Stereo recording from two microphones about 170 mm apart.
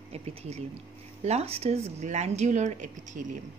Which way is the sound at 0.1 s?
35° right (ahead or behind).